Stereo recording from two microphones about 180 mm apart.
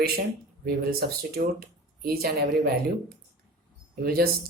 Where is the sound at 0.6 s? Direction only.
60° right (ahead or behind).